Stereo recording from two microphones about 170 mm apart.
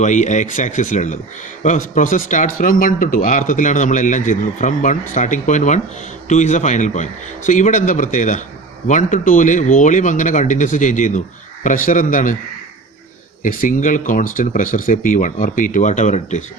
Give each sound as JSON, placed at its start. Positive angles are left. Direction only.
{"t": 0.0, "sound": "speech", "side_deg": 45}
{"t": 13.4, "sound": "speech", "side_deg": 50}